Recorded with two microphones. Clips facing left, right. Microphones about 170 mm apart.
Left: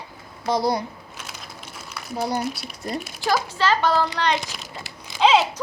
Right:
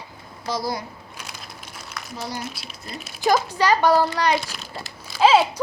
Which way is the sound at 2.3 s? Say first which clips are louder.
Left 6 dB; 50° left (ahead or behind).